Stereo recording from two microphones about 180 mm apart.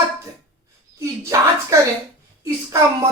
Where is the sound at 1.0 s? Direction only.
15° right (ahead or behind).